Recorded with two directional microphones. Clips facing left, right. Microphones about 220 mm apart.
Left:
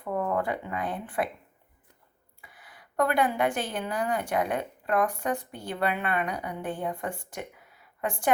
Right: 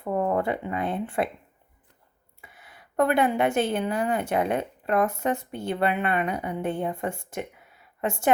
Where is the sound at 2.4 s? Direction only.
25° right (ahead or behind).